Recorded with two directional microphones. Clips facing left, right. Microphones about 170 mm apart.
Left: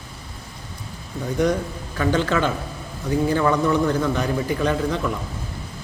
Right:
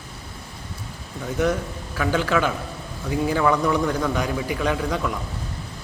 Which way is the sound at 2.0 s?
5° right (ahead or behind).